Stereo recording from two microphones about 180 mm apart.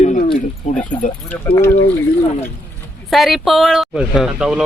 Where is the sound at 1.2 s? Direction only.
10° left (ahead or behind).